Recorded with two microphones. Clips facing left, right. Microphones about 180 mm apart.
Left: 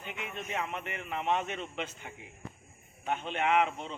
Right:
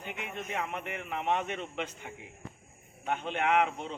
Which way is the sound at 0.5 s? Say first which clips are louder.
Even; 10° right (ahead or behind).